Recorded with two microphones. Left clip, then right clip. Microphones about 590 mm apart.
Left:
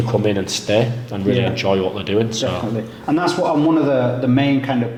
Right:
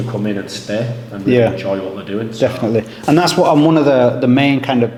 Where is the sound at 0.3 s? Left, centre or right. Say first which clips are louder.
Left 3 dB; left.